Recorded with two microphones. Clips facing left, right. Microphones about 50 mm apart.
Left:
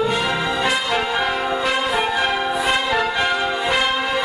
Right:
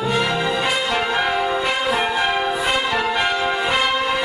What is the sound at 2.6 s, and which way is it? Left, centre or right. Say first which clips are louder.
Music: left 1 dB; centre.